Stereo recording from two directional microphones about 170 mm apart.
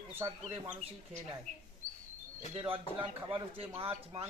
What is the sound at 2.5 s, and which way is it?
A man's voice, 30° right (ahead or behind).